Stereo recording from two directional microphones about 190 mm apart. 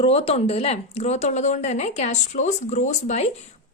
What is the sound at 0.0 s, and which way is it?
A woman's voice, 30° left (ahead or behind).